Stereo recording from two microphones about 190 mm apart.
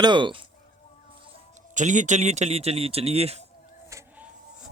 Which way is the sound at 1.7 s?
40° right (ahead or behind).